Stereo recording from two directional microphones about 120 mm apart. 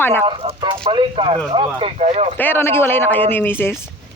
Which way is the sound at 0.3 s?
40° right (ahead or behind).